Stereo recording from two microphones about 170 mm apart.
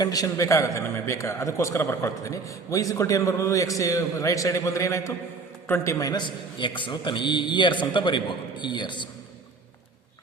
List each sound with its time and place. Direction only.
0.0 s a man's voice: 20° left (ahead or behind)